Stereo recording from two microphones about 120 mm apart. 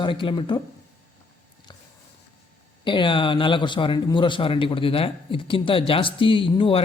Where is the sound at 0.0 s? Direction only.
45° left (ahead or behind).